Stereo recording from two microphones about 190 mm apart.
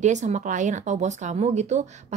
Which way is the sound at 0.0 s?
40° right (ahead or behind).